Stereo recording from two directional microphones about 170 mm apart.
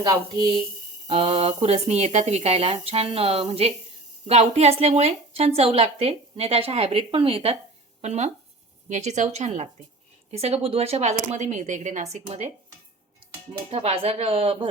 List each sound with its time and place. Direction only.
0.0 s a woman's voice: 25° right (ahead or behind)